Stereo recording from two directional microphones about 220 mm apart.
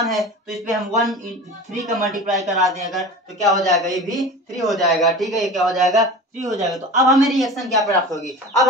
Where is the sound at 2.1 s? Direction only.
35° right (ahead or behind).